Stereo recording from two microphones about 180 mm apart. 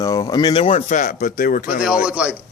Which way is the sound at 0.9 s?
45° left (ahead or behind).